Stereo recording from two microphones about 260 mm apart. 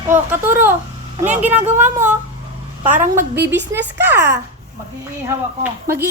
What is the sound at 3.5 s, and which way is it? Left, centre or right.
A woman's voice, centre.